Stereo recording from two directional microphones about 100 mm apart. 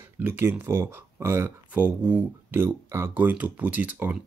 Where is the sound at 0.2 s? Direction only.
25° right (ahead or behind).